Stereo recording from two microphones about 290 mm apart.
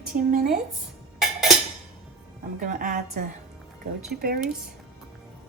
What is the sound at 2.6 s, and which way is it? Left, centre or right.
Speech, right.